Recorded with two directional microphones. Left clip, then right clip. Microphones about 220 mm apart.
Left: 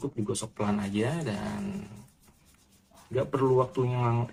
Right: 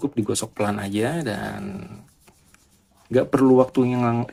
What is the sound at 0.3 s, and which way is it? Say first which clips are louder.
Speech: right 7 dB; 45° right (ahead or behind).